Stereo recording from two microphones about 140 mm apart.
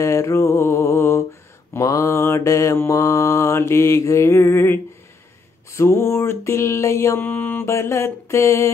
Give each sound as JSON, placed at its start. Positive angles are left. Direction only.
{"t": 0.0, "sound": "mantra", "side_deg": 20}